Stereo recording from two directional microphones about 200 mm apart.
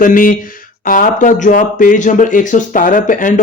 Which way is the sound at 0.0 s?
45° left (ahead or behind).